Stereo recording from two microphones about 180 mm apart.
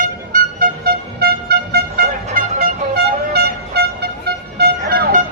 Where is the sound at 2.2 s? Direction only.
45° right (ahead or behind).